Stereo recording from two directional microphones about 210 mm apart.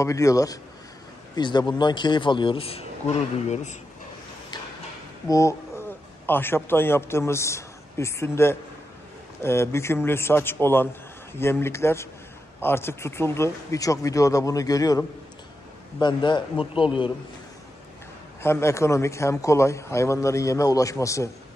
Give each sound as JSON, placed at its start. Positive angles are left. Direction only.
{"t": 0.0, "sound": "a man's voice", "side_deg": 15}
{"t": 5.3, "sound": "a man's voice", "side_deg": 15}
{"t": 18.4, "sound": "a man's voice", "side_deg": 10}